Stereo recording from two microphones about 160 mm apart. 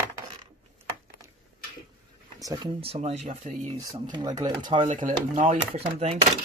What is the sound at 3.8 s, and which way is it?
Speech, 25° right (ahead or behind).